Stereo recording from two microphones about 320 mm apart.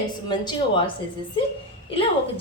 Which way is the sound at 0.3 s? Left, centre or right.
Centre.